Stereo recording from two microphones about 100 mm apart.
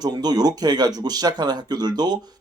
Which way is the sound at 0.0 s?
40° right (ahead or behind).